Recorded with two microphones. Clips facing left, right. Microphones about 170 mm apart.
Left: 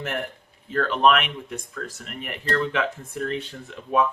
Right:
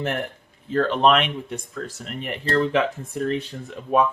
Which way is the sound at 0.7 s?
30° right (ahead or behind).